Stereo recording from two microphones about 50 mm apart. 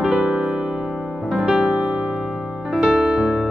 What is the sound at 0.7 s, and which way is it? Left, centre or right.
Music, centre.